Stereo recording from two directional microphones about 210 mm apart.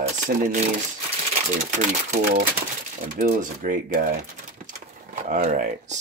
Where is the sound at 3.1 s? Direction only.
40° right (ahead or behind).